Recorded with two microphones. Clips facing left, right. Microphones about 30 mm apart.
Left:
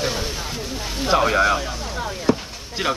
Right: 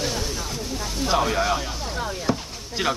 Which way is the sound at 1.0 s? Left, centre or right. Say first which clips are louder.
Left 5 dB; left.